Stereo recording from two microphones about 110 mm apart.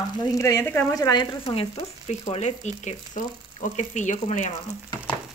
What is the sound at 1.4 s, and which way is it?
Speech, 60° left (ahead or behind).